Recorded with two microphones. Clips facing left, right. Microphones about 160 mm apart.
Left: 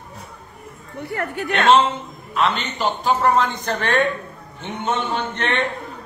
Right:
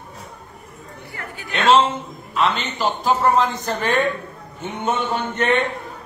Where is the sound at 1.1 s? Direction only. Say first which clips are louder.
Left 9 dB; 65° left (ahead or behind).